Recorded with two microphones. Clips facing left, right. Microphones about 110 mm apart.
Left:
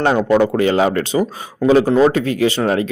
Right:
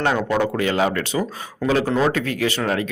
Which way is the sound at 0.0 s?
30° left (ahead or behind).